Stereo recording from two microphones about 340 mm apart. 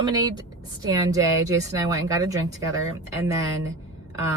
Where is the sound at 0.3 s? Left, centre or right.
Centre.